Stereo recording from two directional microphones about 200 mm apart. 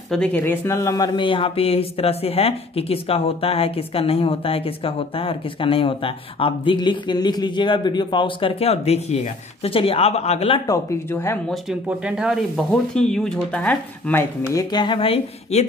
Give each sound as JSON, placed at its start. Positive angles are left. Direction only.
{"t": 0.1, "sound": "speech", "side_deg": 5}
{"t": 10.7, "sound": "speech", "side_deg": 10}
{"t": 11.5, "sound": "speech", "side_deg": -5}